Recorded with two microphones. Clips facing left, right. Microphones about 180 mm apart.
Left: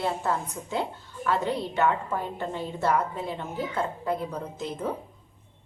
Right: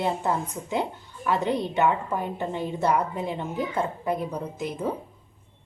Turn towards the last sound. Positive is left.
turn(degrees=-10)  # may be behind; listen again after turning